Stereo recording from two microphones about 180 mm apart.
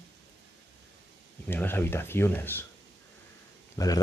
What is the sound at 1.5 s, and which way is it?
Speech, 10° left (ahead or behind).